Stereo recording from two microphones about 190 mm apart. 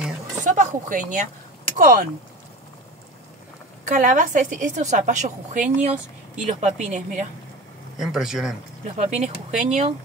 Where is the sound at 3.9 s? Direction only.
40° right (ahead or behind).